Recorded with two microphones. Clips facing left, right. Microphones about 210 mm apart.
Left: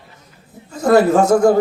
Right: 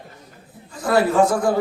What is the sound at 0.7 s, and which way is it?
Speech, 45° left (ahead or behind).